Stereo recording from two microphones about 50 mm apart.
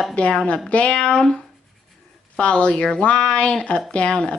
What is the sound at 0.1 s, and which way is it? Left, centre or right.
Speech, left.